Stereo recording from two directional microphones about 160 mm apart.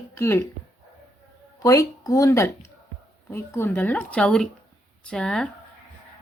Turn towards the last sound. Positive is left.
turn(degrees=5)  # may be behind; listen again after turning